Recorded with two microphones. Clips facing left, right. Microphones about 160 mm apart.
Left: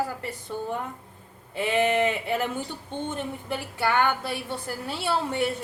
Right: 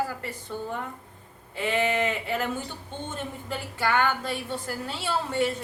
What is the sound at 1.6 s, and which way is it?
A woman's voice, 15° left (ahead or behind).